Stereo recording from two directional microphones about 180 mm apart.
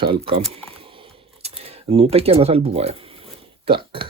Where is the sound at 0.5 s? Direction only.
30° right (ahead or behind).